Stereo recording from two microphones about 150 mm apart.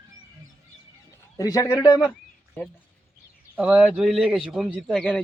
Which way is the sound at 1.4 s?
20° left (ahead or behind).